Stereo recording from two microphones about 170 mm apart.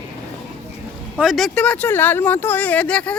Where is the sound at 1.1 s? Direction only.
Centre (ahead or behind).